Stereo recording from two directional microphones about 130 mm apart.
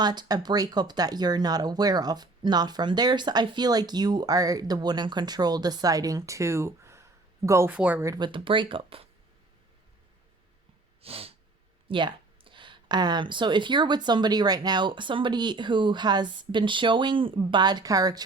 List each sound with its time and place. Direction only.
0.0 s speech: 35° right (ahead or behind)
7.7 s speech: 10° right (ahead or behind)
8.0 s speech: 30° right (ahead or behind)
8.3 s speech: 40° right (ahead or behind)
11.0 s snort: 50° right (ahead or behind)
11.9 s speech: 40° right (ahead or behind)